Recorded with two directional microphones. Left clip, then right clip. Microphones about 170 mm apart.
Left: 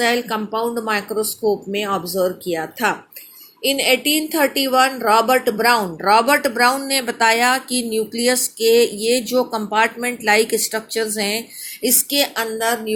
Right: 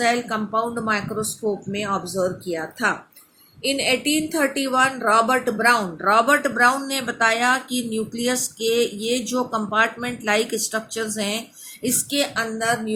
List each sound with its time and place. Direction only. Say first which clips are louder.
0.0 s a woman's voice: left 2 dB; 30° left (ahead or behind)